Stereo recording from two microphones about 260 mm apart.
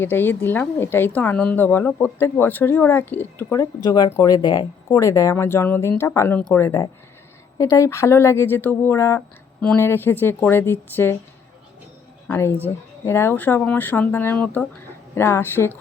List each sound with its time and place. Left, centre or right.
0.0 s a woman's voice: centre
12.3 s a woman's voice: centre